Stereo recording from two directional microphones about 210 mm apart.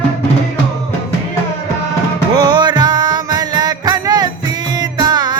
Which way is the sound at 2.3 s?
20° right (ahead or behind).